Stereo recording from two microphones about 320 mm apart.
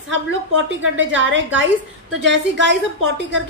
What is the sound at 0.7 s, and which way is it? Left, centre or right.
A woman's voice, right.